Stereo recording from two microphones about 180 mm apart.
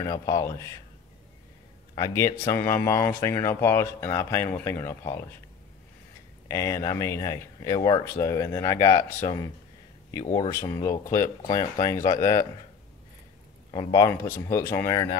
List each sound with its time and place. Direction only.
0.0 s speech: 20° left (ahead or behind)
2.0 s speech: 20° left (ahead or behind)
6.4 s speech: 15° left (ahead or behind)
13.7 s speech: 25° left (ahead or behind)